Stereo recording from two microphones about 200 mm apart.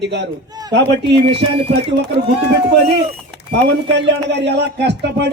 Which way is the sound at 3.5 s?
60° right (ahead or behind).